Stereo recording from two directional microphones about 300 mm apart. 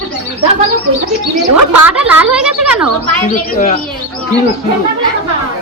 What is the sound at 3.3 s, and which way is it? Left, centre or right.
Speech, left.